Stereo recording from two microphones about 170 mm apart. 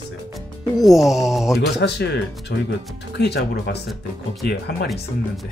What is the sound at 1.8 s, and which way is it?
Speech, 85° left.